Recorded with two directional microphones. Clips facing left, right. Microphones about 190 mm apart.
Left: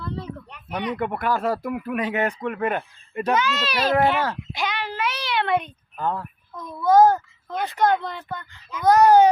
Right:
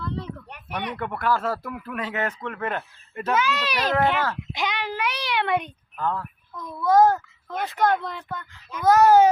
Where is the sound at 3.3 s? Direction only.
10° right (ahead or behind).